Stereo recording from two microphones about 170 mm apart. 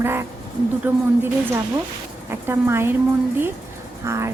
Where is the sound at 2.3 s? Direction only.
15° right (ahead or behind).